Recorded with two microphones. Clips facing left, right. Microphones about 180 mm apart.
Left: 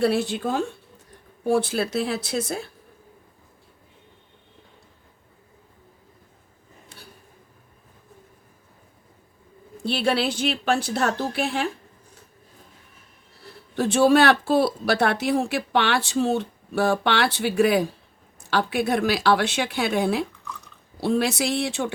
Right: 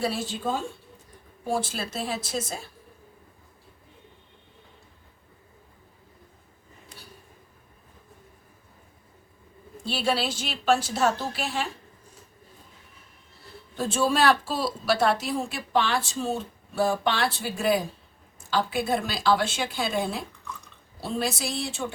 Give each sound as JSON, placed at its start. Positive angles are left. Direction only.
{"t": 0.0, "sound": "a woman's voice", "side_deg": 65}
{"t": 9.8, "sound": "a woman's voice", "side_deg": 60}
{"t": 13.7, "sound": "a woman's voice", "side_deg": 70}